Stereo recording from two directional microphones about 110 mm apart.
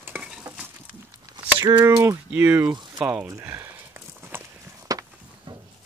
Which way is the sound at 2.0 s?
20° right (ahead or behind).